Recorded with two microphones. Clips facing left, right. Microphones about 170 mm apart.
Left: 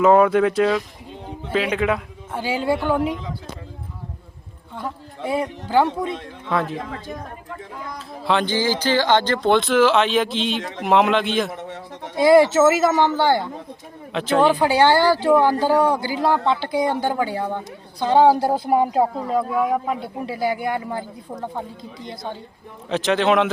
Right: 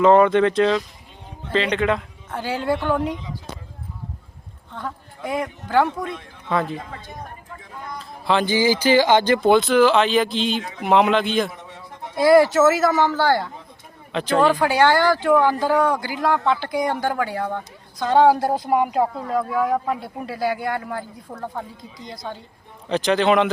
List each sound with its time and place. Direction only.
0.0 s speech: 5° left (ahead or behind)
5.2 s a man's voice: 30° left (ahead or behind)
6.5 s speech: centre (ahead or behind)
7.9 s speech: centre (ahead or behind)
12.1 s a man's voice: 25° left (ahead or behind)
14.1 s speech: centre (ahead or behind)
14.6 s a man's voice: 30° left (ahead or behind)
19.5 s a man's voice: 15° left (ahead or behind)
22.9 s speech: centre (ahead or behind)